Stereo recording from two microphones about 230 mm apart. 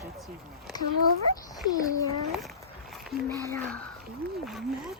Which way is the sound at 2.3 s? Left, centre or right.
Centre.